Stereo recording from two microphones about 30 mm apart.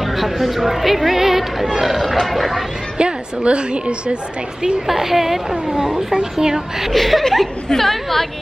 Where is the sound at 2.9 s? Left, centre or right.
Right.